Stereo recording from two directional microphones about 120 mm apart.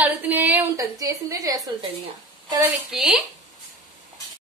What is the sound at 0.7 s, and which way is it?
Speech, 30° right (ahead or behind).